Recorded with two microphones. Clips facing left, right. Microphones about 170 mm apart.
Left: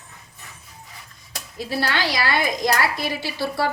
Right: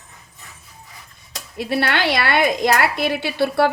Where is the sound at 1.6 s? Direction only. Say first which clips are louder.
Right 4 dB; 65° right (ahead or behind).